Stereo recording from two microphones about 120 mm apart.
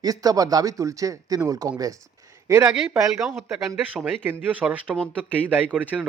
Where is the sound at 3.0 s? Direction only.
25° right (ahead or behind).